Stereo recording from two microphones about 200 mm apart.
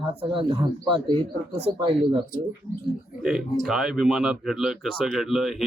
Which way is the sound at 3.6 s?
Centre (ahead or behind).